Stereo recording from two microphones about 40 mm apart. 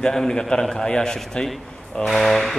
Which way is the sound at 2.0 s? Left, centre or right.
Centre.